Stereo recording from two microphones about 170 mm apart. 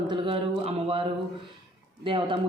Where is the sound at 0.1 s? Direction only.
30° right (ahead or behind).